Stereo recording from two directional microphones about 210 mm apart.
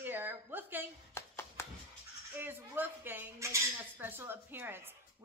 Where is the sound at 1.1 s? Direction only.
10° left (ahead or behind).